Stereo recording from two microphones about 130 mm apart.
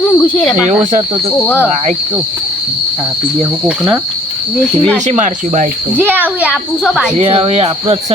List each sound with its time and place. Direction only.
0.1 s speech: 20° left (ahead or behind)
5.0 s speech: 70° right (ahead or behind)
6.0 s a child's voice: 15° right (ahead or behind)
6.8 s speech: centre (ahead or behind)
7.2 s speech: 50° right (ahead or behind)